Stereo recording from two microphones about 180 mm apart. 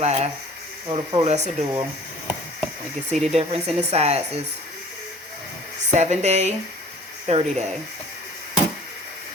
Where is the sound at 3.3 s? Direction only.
35° right (ahead or behind).